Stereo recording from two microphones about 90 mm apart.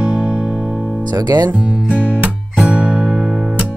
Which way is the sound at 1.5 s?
15° right (ahead or behind).